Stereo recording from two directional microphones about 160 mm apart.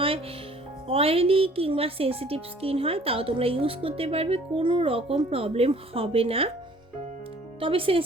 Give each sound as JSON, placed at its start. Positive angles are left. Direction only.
{"t": 0.9, "sound": "speech", "side_deg": -35}
{"t": 7.6, "sound": "speech", "side_deg": -35}